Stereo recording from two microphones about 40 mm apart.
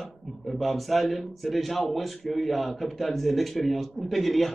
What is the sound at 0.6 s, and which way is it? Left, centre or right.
A man's voice, centre.